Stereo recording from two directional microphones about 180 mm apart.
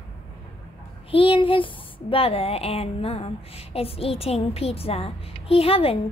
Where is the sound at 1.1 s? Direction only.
30° left (ahead or behind).